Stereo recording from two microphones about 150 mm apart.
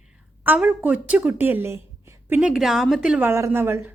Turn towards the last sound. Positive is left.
turn(degrees=-15)  # may be behind; listen again after turning